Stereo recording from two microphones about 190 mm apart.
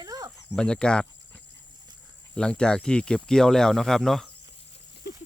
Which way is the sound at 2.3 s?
5° left (ahead or behind).